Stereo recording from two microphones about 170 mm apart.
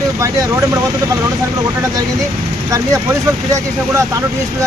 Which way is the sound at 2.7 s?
20° right (ahead or behind).